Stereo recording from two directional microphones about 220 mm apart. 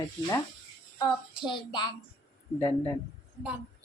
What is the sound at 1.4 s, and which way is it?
Speech, 20° left (ahead or behind).